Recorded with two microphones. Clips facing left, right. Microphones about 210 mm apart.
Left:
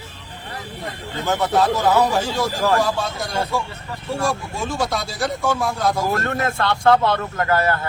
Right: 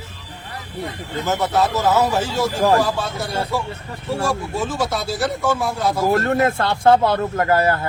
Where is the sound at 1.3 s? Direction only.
5° right (ahead or behind).